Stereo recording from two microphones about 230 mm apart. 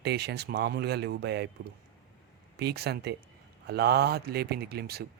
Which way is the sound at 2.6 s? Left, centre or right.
Right.